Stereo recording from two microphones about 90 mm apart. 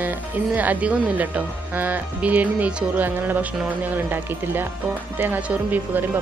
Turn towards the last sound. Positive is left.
turn(degrees=-20)  # may be behind; listen again after turning